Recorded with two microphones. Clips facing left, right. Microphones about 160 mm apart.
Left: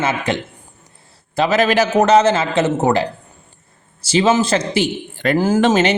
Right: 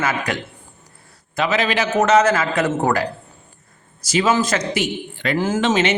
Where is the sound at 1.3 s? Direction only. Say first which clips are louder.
Left 5 dB; 35° left (ahead or behind).